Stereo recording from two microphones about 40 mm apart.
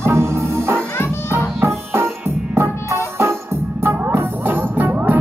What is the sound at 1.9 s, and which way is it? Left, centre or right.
Music, right.